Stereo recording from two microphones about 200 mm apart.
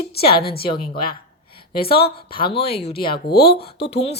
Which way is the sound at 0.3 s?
50° left (ahead or behind).